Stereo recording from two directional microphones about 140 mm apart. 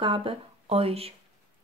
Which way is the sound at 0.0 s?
40° right (ahead or behind).